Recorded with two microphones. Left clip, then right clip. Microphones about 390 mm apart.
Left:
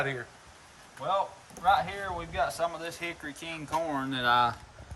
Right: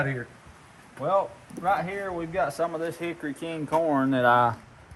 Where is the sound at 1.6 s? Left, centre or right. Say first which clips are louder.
Even; centre.